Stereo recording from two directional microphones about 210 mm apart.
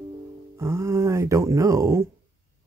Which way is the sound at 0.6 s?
15° right (ahead or behind).